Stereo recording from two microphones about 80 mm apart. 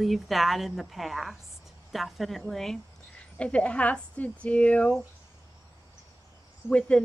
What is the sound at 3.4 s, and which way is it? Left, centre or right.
A woman's voice, centre.